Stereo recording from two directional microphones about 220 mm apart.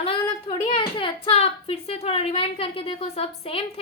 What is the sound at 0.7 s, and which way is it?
A woman's voice, 25° left (ahead or behind).